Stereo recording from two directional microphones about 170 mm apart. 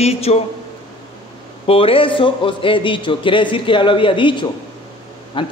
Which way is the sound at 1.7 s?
30° left (ahead or behind).